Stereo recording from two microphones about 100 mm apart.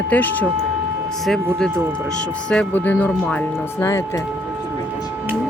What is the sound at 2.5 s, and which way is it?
Speech, 15° left (ahead or behind).